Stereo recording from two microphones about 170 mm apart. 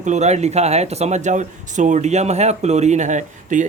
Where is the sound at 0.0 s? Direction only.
40° right (ahead or behind).